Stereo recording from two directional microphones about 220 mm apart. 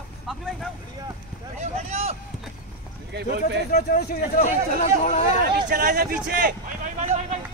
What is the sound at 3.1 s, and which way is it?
Speech, 50° right (ahead or behind).